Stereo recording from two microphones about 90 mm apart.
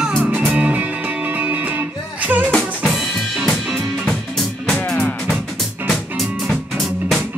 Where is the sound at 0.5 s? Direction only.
15° right (ahead or behind).